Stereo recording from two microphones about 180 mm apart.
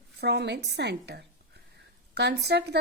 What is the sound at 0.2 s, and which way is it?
A woman's voice, 70° right (ahead or behind).